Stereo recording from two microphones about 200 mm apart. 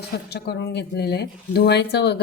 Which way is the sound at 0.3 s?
55° left (ahead or behind).